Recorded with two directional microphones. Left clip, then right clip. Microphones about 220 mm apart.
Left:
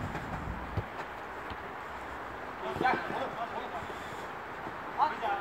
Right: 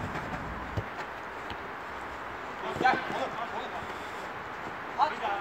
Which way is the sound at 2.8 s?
30° right (ahead or behind).